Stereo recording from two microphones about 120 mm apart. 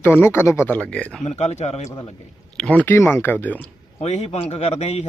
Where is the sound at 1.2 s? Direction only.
65° left (ahead or behind).